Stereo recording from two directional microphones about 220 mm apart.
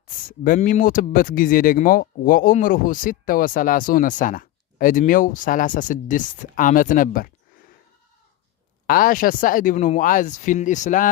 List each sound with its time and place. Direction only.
0.4 s speech: 40° left (ahead or behind)
8.9 s speech: 40° left (ahead or behind)